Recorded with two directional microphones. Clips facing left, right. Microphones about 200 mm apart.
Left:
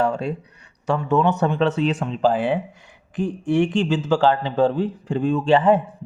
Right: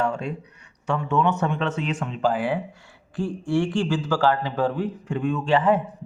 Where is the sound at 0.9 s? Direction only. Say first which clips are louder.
Left 3 dB; 35° left (ahead or behind).